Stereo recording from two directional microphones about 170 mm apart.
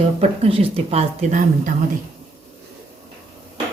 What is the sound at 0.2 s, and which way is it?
A woman's voice, 35° right (ahead or behind).